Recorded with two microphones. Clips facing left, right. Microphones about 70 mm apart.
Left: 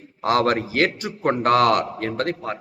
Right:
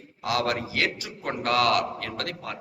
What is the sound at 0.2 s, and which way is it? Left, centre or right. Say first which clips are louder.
A man's voice: left 7 dB; left.